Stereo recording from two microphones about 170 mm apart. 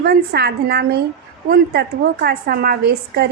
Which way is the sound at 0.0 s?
70° right (ahead or behind).